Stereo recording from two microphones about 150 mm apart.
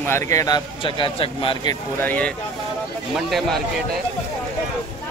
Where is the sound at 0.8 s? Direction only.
35° left (ahead or behind).